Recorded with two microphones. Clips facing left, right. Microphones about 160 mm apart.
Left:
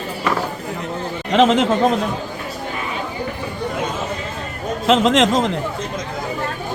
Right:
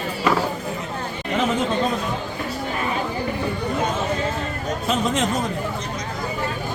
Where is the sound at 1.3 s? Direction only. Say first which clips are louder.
Left 8 dB; 90° left.